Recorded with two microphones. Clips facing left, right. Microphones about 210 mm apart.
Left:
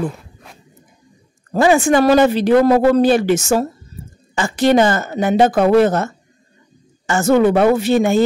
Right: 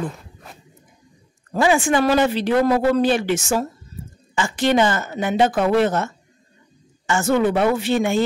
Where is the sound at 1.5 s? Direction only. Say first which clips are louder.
Left 5 dB; 40° left (ahead or behind).